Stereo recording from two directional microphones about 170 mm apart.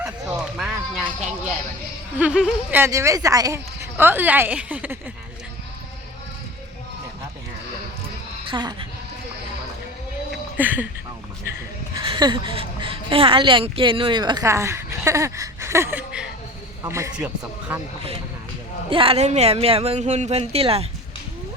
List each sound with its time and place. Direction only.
0.0 s a sound: 5° right (ahead or behind)
2.1 s speech: 5° right (ahead or behind)
8.4 s speech: 25° right (ahead or behind)
10.6 s speech: 10° right (ahead or behind)
12.0 s speech: 30° right (ahead or behind); by 17.7 s 10° right (ahead or behind)
18.9 s speech: 35° right (ahead or behind)